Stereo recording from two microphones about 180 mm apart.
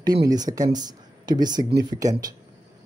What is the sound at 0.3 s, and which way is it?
Speech, 20° right (ahead or behind).